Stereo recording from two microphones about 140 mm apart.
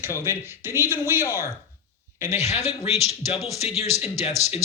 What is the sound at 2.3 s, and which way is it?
Speech, 50° left (ahead or behind).